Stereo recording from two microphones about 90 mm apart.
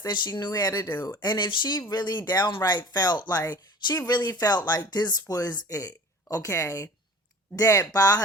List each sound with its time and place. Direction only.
0.1 s speech: 55° left (ahead or behind)